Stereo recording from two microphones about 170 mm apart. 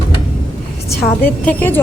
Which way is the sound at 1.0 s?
10° left (ahead or behind).